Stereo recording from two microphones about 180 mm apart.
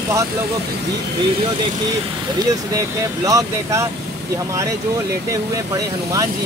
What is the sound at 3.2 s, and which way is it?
Speech, 15° right (ahead or behind).